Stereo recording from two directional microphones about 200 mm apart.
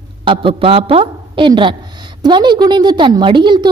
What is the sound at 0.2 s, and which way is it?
A woman's voice, 25° right (ahead or behind).